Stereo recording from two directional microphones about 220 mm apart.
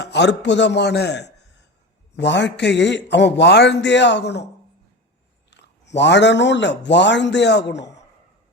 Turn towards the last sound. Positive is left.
turn(degrees=50)  # may be behind; listen again after turning